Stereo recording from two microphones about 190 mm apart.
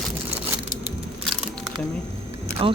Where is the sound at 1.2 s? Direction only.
Centre (ahead or behind).